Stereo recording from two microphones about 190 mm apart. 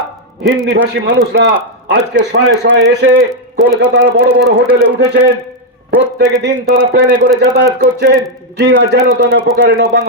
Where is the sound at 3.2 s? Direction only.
5° right (ahead or behind).